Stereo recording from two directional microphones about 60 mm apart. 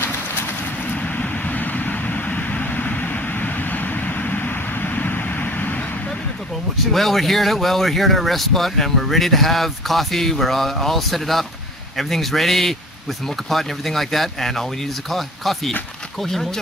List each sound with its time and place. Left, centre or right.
0.8 s vehicle: left
6.9 s speech: centre